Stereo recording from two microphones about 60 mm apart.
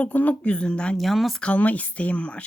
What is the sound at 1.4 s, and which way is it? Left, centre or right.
Speech, left.